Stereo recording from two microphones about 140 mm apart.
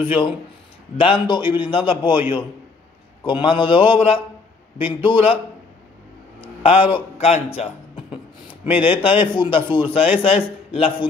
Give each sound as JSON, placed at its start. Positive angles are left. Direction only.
{"t": 0.0, "sound": "a man's voice", "side_deg": 40}
{"t": 3.3, "sound": "a man's voice", "side_deg": 35}
{"t": 6.6, "sound": "speech", "side_deg": 40}
{"t": 7.4, "sound": "music", "side_deg": 40}
{"t": 8.6, "sound": "a man's voice", "side_deg": 40}